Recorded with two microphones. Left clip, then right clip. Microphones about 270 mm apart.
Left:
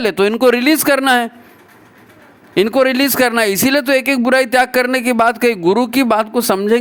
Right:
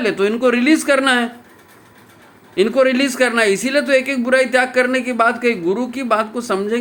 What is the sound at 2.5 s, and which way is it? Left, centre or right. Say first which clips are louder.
Speech: left 2 dB; left.